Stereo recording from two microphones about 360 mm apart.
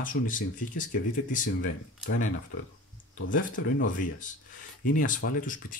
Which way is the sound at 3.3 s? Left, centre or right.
Left.